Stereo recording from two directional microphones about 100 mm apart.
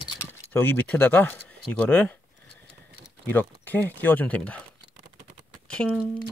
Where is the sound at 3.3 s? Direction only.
20° left (ahead or behind).